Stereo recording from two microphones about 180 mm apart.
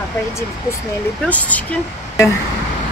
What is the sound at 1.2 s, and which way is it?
Speech, 10° left (ahead or behind).